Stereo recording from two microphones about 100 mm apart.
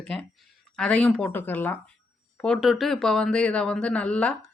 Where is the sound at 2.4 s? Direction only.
Centre (ahead or behind).